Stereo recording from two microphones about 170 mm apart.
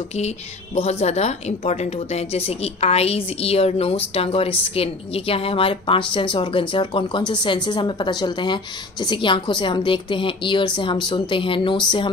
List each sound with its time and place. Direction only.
0.7 s a woman's voice: 40° left (ahead or behind)